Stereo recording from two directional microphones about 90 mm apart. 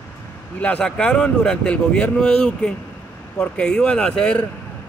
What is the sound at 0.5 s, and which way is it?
Speech, 15° left (ahead or behind).